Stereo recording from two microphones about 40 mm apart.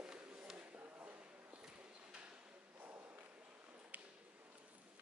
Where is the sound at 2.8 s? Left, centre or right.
Right.